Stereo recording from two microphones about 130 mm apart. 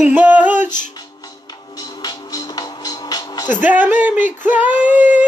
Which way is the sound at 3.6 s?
10° right (ahead or behind).